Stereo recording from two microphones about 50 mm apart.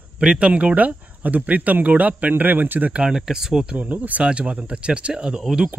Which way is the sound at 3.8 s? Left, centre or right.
Right.